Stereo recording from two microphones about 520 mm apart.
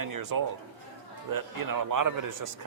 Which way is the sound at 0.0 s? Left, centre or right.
Right.